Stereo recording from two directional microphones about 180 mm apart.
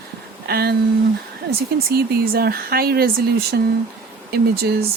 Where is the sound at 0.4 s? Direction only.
60° right (ahead or behind).